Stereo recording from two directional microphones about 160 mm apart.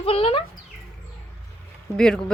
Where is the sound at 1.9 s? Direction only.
5° left (ahead or behind).